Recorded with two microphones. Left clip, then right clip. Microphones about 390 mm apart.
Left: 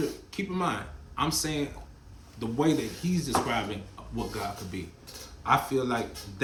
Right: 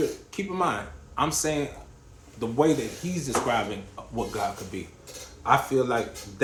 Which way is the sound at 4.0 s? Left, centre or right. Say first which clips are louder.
Right 6 dB; centre.